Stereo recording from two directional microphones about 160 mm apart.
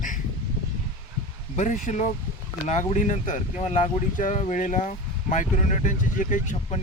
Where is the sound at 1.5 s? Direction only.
50° left (ahead or behind).